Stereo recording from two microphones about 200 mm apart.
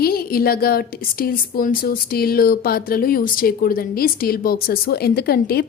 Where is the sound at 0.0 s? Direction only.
50° left (ahead or behind).